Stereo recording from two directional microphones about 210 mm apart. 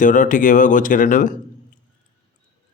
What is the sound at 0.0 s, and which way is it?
Speech, 40° left (ahead or behind).